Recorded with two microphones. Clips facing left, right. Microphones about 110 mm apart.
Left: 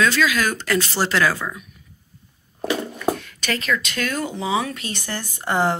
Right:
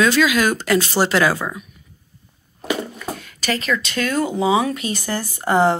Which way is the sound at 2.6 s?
5° right (ahead or behind).